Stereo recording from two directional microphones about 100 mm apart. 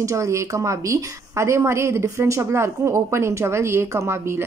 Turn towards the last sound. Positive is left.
turn(degrees=-25)  # may be behind; listen again after turning